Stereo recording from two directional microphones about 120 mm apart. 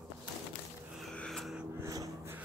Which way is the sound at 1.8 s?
30° right (ahead or behind).